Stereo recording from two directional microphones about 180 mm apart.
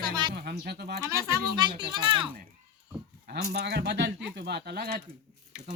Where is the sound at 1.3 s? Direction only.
25° right (ahead or behind).